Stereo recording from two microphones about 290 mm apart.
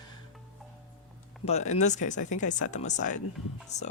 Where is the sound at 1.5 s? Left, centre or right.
Left.